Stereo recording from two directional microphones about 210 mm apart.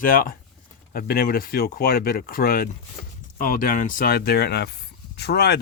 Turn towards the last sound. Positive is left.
turn(degrees=50)  # may be behind; listen again after turning